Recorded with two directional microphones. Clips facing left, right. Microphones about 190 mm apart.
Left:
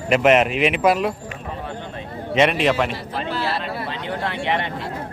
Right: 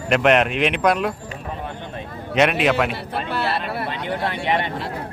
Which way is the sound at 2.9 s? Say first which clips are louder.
Even; 60° right (ahead or behind).